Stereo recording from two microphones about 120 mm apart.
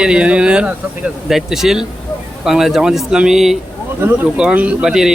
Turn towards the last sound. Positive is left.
turn(degrees=-5)  # may be behind; listen again after turning